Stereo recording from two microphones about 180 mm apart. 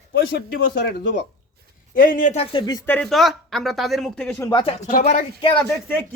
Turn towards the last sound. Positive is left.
turn(degrees=10)  # may be behind; listen again after turning